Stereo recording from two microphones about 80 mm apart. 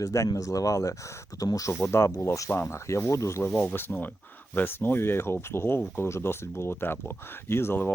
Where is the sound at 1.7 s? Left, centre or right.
Left.